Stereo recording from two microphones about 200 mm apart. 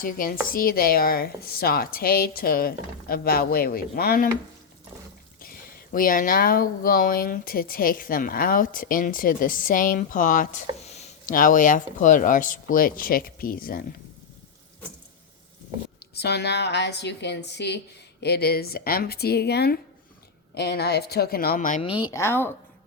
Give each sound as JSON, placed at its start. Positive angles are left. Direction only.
{"t": 0.0, "sound": "speech", "side_deg": 45}
{"t": 5.4, "sound": "speech", "side_deg": 45}
{"t": 16.0, "sound": "a woman's voice", "side_deg": 55}
{"t": 21.8, "sound": "speech", "side_deg": 25}